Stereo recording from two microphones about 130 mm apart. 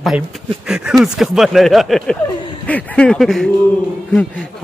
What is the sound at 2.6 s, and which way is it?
A man's voice, 10° left (ahead or behind).